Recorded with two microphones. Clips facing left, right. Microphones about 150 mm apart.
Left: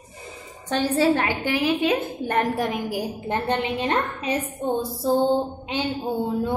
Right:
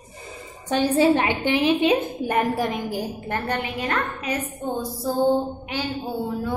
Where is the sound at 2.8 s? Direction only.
15° left (ahead or behind).